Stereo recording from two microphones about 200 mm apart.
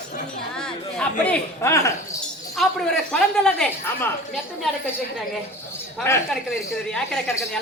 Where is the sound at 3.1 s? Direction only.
5° left (ahead or behind).